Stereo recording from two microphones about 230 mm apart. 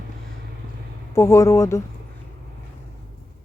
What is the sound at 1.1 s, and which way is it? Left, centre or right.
Speech, centre.